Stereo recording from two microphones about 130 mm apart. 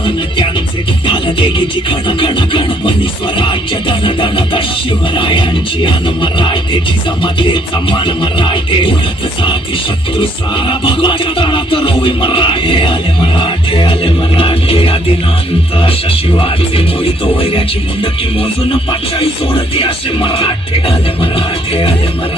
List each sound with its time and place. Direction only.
0.0 s music: 40° left (ahead or behind)
10.2 s music: 40° left (ahead or behind)
18.9 s music: 45° left (ahead or behind)